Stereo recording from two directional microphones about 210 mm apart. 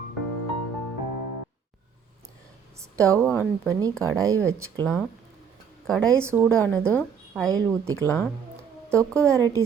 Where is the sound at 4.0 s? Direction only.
15° right (ahead or behind).